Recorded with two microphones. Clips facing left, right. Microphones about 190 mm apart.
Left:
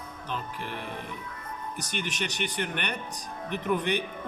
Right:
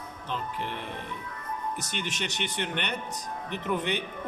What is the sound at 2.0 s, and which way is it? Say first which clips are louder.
Speech: left 2 dB; 25° right (ahead or behind).